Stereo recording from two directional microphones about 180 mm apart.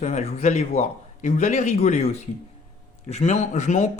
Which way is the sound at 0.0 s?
40° left (ahead or behind).